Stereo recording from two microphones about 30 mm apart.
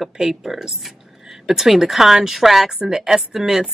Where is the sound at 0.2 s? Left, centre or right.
Centre.